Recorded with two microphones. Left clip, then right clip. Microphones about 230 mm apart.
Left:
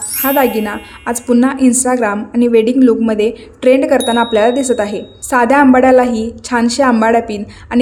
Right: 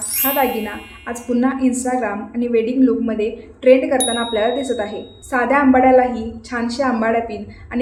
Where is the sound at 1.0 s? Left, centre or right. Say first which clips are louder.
Left 7 dB; left.